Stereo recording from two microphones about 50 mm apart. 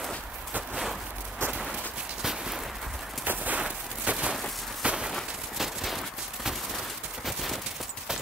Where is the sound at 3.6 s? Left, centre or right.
Right.